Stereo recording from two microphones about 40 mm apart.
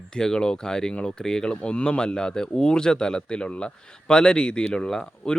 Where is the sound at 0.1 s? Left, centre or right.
Centre.